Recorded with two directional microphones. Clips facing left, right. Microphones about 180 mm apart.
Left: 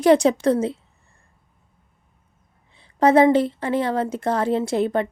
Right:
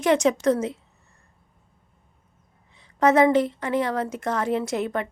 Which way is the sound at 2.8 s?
30° left (ahead or behind).